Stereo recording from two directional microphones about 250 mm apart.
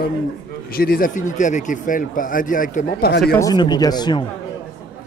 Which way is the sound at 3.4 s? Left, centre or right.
Centre.